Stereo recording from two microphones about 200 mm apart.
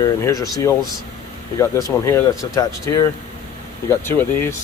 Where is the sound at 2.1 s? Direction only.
15° left (ahead or behind).